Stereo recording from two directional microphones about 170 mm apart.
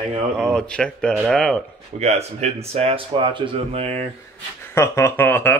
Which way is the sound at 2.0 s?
40° right (ahead or behind).